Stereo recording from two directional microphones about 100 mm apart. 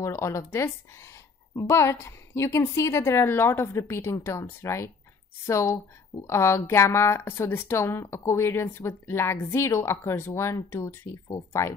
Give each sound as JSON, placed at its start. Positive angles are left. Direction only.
{"t": 0.0, "sound": "a woman's voice", "side_deg": 30}